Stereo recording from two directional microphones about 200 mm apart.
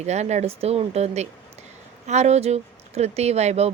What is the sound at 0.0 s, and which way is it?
Speech, 35° right (ahead or behind).